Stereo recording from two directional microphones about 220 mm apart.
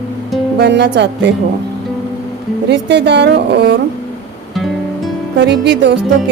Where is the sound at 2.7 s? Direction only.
50° right (ahead or behind).